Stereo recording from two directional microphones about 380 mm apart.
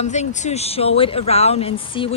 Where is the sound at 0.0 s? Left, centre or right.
Centre.